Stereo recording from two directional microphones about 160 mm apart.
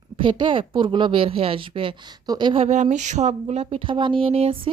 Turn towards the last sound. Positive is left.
turn(degrees=-40)  # may be behind; listen again after turning